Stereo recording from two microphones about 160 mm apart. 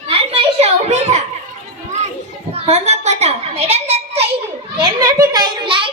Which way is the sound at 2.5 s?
40° right (ahead or behind).